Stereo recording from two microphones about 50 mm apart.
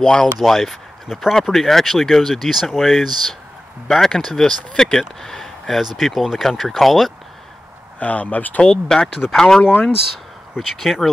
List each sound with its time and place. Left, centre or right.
0.0 s speech: centre
0.4 s speech: centre
1.0 s speech: centre
1.5 s speech: centre
3.8 s speech: centre
8.0 s speech: left
8.6 s speech: centre
9.7 s speech: left
10.8 s speech: centre